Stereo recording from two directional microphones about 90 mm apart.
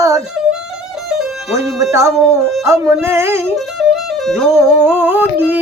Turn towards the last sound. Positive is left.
turn(degrees=-20)  # may be behind; listen again after turning